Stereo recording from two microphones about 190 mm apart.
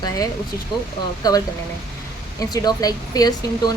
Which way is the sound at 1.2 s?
20° left (ahead or behind).